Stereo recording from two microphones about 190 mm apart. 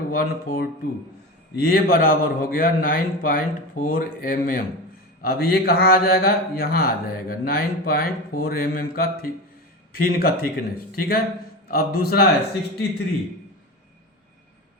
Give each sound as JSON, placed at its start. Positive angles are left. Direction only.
{"t": 0.1, "sound": "a man's voice", "side_deg": 50}